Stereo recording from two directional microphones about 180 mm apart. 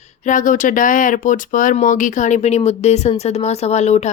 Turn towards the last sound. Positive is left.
turn(degrees=40)  # may be behind; listen again after turning